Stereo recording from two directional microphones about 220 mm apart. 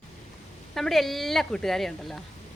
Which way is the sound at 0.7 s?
Centre (ahead or behind).